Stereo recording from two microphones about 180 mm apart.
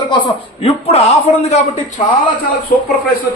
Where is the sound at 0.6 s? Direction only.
35° left (ahead or behind).